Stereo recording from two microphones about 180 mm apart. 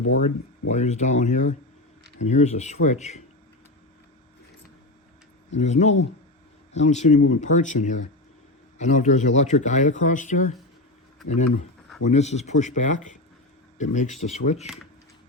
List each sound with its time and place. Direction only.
0.2 s speech: 40° left (ahead or behind)
5.5 s speech: 40° left (ahead or behind)
12.0 s speech: 40° left (ahead or behind)